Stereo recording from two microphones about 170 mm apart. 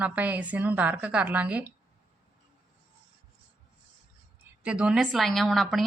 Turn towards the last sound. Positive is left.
turn(degrees=0)  # may be behind; listen again after turning